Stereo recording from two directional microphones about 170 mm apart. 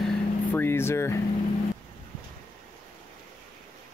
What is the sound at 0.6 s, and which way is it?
Speech, 15° left (ahead or behind).